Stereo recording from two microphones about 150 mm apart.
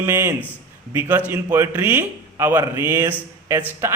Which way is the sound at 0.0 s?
15° right (ahead or behind).